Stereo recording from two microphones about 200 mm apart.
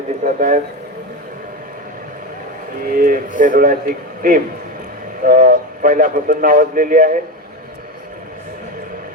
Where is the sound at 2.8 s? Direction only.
45° right (ahead or behind).